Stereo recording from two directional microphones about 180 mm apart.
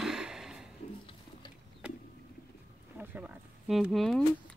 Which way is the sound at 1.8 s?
5° right (ahead or behind).